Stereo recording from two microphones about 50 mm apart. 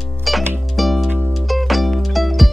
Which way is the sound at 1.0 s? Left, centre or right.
Centre.